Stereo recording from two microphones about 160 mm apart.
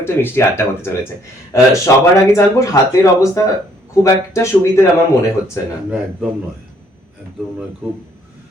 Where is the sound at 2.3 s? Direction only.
20° left (ahead or behind).